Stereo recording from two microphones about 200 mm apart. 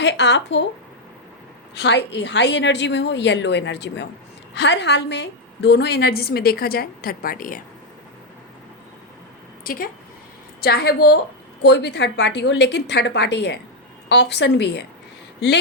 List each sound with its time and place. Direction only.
0.0 s a woman's voice: 60° left (ahead or behind)
1.7 s a woman's voice: 60° left (ahead or behind); by 7.6 s 45° left (ahead or behind)
9.6 s a woman's voice: 45° left (ahead or behind)